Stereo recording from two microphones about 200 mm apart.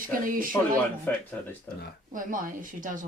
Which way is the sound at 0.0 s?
45° right (ahead or behind).